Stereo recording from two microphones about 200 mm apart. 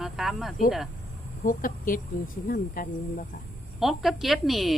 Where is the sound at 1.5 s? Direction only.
45° left (ahead or behind).